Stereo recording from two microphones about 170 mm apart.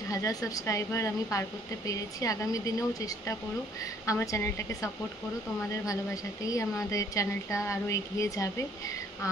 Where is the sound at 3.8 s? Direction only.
20° left (ahead or behind).